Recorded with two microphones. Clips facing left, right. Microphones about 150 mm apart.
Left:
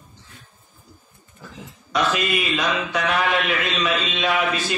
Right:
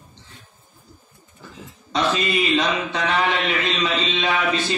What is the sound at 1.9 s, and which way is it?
Mantra, 30° right (ahead or behind).